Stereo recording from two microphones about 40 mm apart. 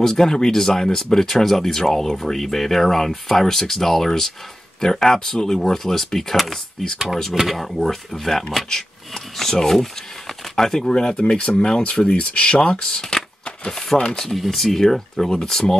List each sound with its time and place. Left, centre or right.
0.0 s speech: centre; by 12.7 s left
12.8 s speech: centre